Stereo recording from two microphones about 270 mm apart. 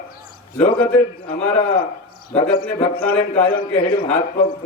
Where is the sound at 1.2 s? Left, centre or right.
Left.